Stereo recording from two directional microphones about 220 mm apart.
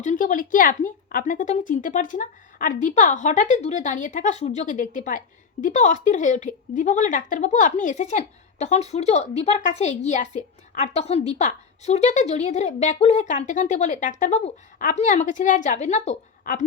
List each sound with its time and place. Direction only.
0.0 s a woman's voice: 35° left (ahead or behind)